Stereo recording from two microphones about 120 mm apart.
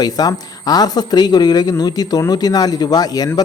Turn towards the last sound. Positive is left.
turn(degrees=35)  # may be behind; listen again after turning